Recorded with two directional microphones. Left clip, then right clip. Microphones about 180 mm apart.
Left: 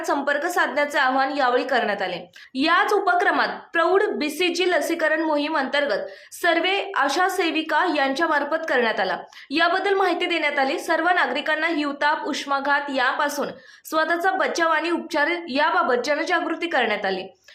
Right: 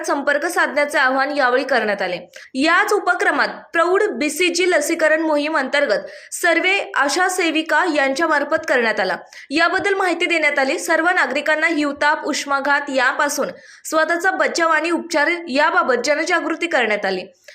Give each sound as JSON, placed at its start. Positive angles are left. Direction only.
{"t": 0.0, "sound": "a woman's voice", "side_deg": -20}